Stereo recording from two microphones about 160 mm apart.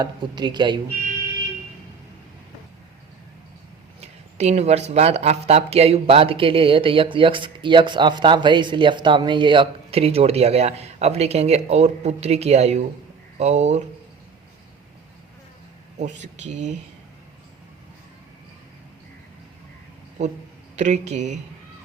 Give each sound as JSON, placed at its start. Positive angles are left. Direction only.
{"t": 0.0, "sound": "speech", "side_deg": -30}
{"t": 4.0, "sound": "speech", "side_deg": -45}
{"t": 16.0, "sound": "speech", "side_deg": -45}
{"t": 20.7, "sound": "speech", "side_deg": -50}